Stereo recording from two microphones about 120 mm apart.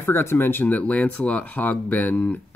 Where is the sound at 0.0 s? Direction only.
20° left (ahead or behind).